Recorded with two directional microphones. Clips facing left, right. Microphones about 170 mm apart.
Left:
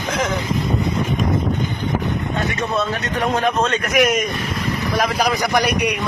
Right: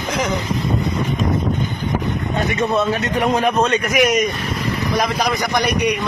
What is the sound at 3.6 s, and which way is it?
A man's voice, centre (ahead or behind).